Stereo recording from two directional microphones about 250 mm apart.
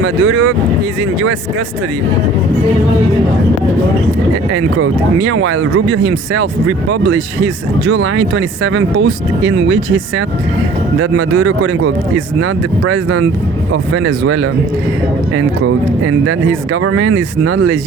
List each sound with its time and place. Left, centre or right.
0.0 s speech: right
4.5 s a man's voice: right